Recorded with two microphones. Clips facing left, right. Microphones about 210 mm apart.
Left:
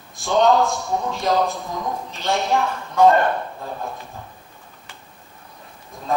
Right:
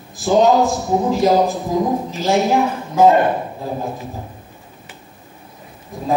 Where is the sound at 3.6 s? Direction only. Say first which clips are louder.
Right 6 dB; 30° right (ahead or behind).